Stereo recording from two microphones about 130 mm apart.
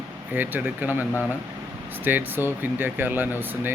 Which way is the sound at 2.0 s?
15° right (ahead or behind).